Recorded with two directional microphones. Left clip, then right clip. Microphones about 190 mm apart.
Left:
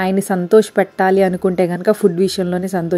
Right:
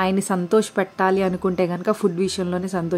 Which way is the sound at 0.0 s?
15° left (ahead or behind).